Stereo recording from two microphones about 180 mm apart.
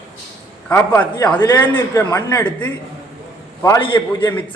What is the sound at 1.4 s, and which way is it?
A man's voice, 20° left (ahead or behind).